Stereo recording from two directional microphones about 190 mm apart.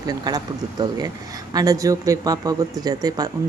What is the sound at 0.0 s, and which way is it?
Speech, 20° right (ahead or behind).